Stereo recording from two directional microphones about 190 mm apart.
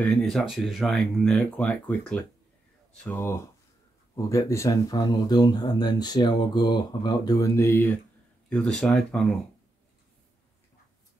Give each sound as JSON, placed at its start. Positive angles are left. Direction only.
{"t": 0.0, "sound": "speech", "side_deg": 5}